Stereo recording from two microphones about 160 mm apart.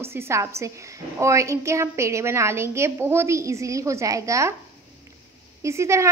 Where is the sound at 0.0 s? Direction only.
15° right (ahead or behind).